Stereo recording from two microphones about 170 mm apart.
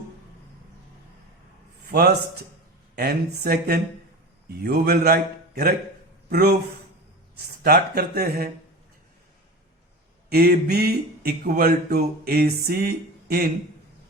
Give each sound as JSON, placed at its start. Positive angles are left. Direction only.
{"t": 1.9, "sound": "a man's voice", "side_deg": -65}
{"t": 10.2, "sound": "speech", "side_deg": -65}